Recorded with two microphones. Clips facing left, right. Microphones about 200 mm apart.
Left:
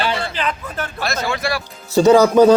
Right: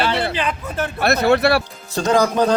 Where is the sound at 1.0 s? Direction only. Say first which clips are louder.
Right 8 dB; 60° right (ahead or behind).